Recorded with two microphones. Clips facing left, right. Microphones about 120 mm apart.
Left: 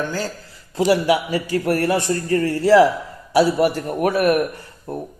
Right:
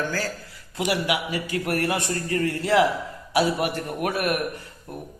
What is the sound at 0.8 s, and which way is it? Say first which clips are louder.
A man's voice: left 8 dB; 35° left (ahead or behind).